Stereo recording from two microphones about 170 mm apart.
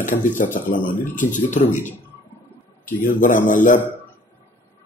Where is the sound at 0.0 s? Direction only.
50° left (ahead or behind).